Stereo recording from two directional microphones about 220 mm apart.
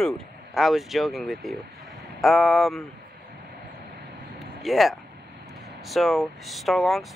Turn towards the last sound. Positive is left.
turn(degrees=0)  # may be behind; listen again after turning